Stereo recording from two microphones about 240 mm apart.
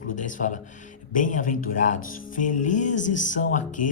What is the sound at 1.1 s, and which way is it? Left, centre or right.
Speech, left.